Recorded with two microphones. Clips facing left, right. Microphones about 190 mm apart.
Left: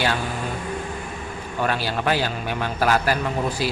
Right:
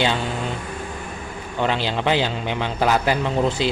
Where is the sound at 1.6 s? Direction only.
20° right (ahead or behind).